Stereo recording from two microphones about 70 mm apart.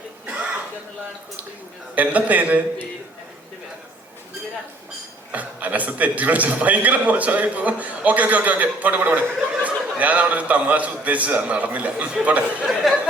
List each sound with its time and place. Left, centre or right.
2.0 s a man's voice: right
5.3 s a man's voice: right
12.6 s speech: centre